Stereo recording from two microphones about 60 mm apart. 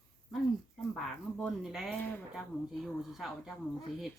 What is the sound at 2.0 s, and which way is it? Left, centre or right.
Speech, left.